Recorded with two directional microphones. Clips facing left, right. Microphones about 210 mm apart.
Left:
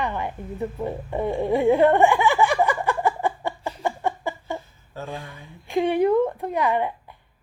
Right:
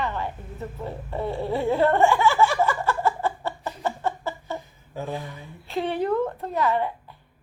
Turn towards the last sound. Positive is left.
turn(degrees=15)  # may be behind; listen again after turning